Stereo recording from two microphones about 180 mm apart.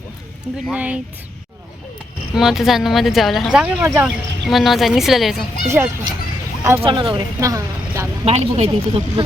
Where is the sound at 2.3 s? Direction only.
Centre (ahead or behind).